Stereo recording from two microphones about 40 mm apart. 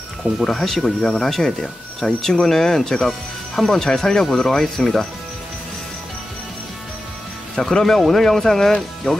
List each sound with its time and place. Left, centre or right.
0.2 s speech: centre
7.6 s speech: centre